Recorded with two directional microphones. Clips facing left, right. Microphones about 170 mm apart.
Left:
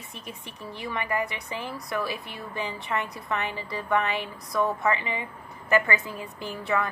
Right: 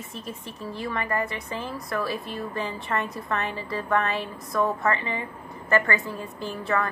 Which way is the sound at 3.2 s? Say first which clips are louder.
Right 1 dB; 15° left (ahead or behind).